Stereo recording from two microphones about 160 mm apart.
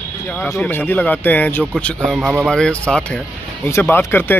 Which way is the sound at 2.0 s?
5° right (ahead or behind).